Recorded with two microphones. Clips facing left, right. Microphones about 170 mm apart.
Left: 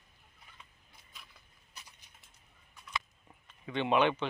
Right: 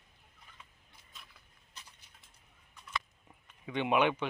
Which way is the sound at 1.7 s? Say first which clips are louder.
Even; 10° left (ahead or behind).